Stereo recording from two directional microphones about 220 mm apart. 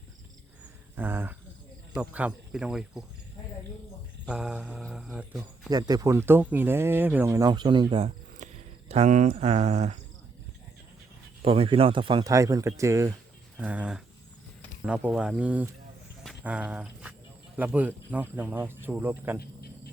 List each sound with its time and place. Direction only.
0.9 s speech: 10° right (ahead or behind)
4.3 s speech: 5° right (ahead or behind)
5.7 s speech: 15° right (ahead or behind)
11.4 s speech: 25° right (ahead or behind); by 15.7 s 5° right (ahead or behind)
16.2 s a sound: 5° right (ahead or behind)
17.6 s speech: 5° right (ahead or behind)